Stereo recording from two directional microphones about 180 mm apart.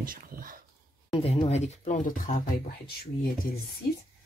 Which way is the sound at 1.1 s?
35° left (ahead or behind).